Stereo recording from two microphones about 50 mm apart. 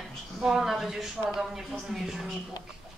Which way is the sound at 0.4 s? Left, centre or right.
Centre.